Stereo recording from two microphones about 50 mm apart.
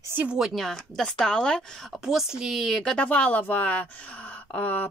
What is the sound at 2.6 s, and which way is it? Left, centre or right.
Speech, centre.